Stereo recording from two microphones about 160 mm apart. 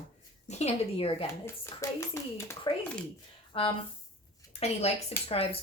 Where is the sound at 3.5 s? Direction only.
35° left (ahead or behind).